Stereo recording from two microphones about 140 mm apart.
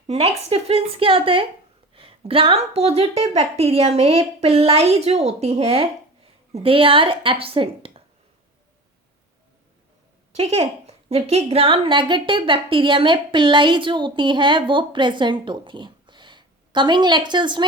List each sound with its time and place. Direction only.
0.1 s a woman's voice: 45° right (ahead or behind)
10.3 s a woman's voice: 45° right (ahead or behind)